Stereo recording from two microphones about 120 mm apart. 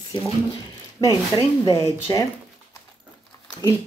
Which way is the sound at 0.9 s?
35° left (ahead or behind).